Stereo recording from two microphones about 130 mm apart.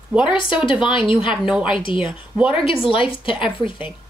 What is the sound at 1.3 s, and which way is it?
Speech, 5° right (ahead or behind).